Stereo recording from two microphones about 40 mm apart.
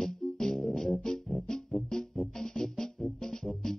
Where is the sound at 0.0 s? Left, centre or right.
Centre.